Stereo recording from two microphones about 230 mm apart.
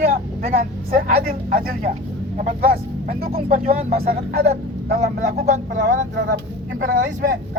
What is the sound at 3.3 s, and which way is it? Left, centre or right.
Speech, right.